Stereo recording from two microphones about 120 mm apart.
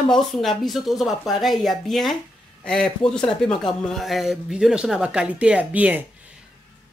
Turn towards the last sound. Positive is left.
turn(degrees=-10)  # may be behind; listen again after turning